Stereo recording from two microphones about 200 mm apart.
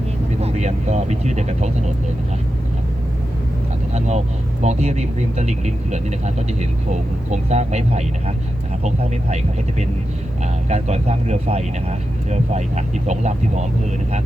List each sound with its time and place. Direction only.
0.4 s speech: 35° right (ahead or behind)
3.9 s speech: 35° right (ahead or behind)